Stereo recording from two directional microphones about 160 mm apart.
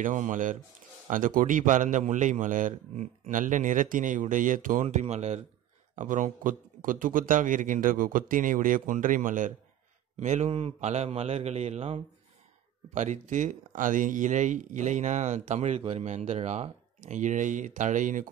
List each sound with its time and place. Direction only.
0.0 s a man's voice: 55° right (ahead or behind)
4.8 s a man's voice: 45° right (ahead or behind)
10.1 s speech: 45° right (ahead or behind)